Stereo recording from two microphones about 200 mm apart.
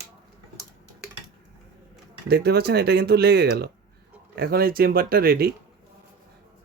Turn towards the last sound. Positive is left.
turn(degrees=-50)  # may be behind; listen again after turning